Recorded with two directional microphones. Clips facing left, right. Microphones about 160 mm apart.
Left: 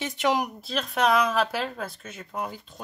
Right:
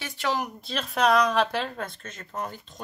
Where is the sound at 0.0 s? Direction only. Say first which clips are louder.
Left 4 dB; 20° left (ahead or behind).